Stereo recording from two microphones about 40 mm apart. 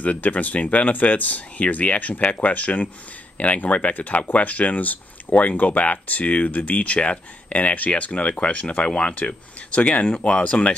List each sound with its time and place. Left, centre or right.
0.0 s speech: left